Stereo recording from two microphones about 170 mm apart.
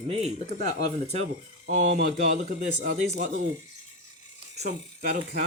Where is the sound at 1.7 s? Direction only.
45° right (ahead or behind).